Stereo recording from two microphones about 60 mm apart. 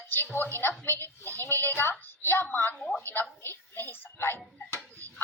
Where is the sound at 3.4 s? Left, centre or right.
Left.